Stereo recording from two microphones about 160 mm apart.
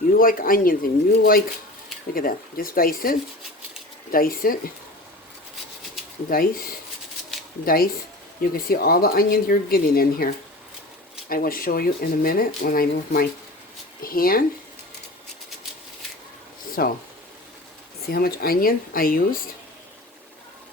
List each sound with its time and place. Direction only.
0.1 s speech: 60° left (ahead or behind)
6.3 s speech: 65° left (ahead or behind)
11.3 s speech: 65° left (ahead or behind)
16.8 s speech: 65° left (ahead or behind)
18.1 s speech: 70° left (ahead or behind)